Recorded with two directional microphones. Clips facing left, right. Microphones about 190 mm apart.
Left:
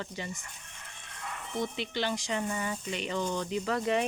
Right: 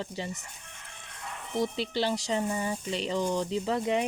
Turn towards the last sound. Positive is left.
turn(degrees=-15)  # may be behind; listen again after turning